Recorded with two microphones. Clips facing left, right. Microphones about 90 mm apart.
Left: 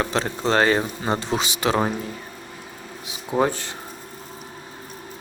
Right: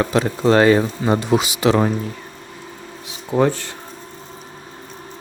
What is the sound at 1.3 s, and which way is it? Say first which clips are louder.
Speech: right 9 dB; 25° right (ahead or behind).